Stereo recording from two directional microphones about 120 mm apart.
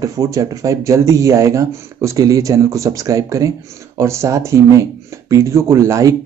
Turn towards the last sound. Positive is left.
turn(degrees=-25)  # may be behind; listen again after turning